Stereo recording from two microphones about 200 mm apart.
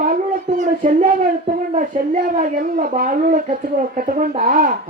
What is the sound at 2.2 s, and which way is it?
A woman's voice, 40° right (ahead or behind).